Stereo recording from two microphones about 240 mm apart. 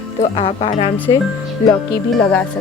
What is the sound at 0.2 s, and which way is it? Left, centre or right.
Speech, left.